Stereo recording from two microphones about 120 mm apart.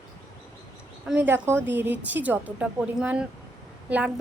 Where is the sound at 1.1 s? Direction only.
15° right (ahead or behind).